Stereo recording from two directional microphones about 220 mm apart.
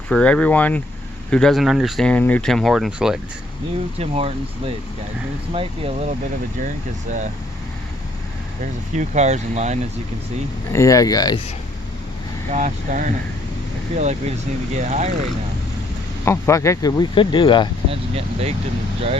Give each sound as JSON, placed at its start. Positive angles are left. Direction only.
{"t": 0.1, "sound": "speech", "side_deg": 5}
{"t": 3.9, "sound": "speech", "side_deg": -30}
{"t": 8.6, "sound": "speech", "side_deg": -35}
{"t": 10.7, "sound": "speech", "side_deg": 15}
{"t": 12.5, "sound": "speech", "side_deg": -35}
{"t": 16.2, "sound": "speech", "side_deg": 15}
{"t": 18.1, "sound": "speech", "side_deg": -25}